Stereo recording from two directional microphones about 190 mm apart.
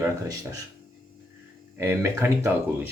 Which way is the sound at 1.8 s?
15° right (ahead or behind).